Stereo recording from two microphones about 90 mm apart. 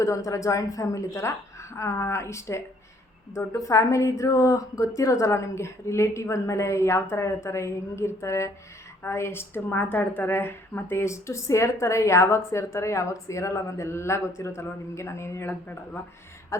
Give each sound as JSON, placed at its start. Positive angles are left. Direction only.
{"t": 0.0, "sound": "a woman's voice", "side_deg": 35}
{"t": 16.5, "sound": "a woman's voice", "side_deg": 35}